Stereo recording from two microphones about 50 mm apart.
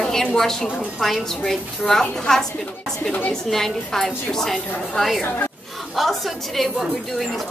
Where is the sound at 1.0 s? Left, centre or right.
Centre.